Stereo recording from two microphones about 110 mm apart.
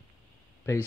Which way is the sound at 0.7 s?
25° left (ahead or behind).